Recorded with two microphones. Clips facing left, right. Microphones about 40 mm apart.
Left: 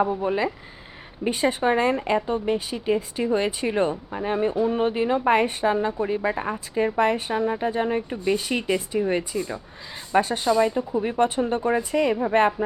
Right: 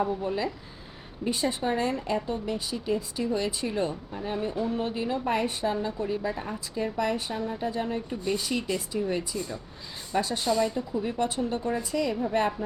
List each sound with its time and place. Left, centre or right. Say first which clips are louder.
0.0 s a woman's voice: left 5 dB; left